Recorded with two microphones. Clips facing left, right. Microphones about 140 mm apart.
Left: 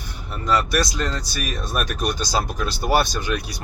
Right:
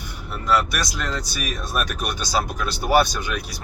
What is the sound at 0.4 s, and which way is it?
Speech, 5° right (ahead or behind).